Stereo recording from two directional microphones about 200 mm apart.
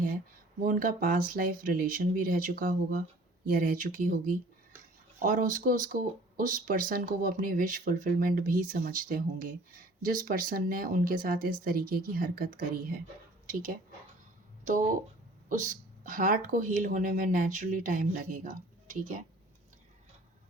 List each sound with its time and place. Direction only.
0.6 s speech: 45° right (ahead or behind)
15.4 s speech: 40° right (ahead or behind)